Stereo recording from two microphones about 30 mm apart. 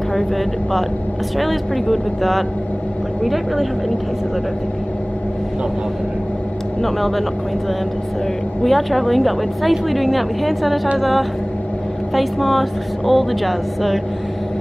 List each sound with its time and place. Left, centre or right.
1.4 s a woman's voice: centre
6.8 s a woman's voice: centre
8.6 s a woman's voice: centre